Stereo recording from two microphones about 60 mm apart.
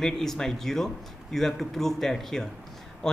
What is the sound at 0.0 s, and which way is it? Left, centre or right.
A man's voice, centre.